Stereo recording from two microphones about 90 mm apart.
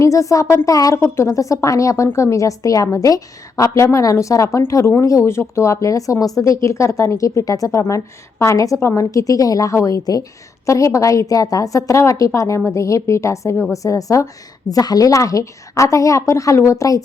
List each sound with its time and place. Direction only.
0.0 s a woman's voice: 35° left (ahead or behind)
1.0 s a woman's voice: 30° left (ahead or behind)